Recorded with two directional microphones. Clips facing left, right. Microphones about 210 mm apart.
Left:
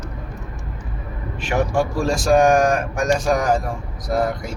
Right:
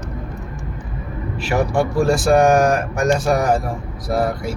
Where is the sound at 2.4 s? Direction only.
5° right (ahead or behind).